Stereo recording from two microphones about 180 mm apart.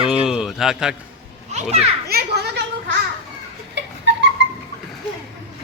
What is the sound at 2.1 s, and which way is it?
Children playing, 60° right (ahead or behind).